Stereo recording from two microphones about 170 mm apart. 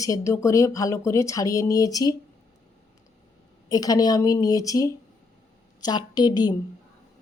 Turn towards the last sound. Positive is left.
turn(degrees=25)  # may be behind; listen again after turning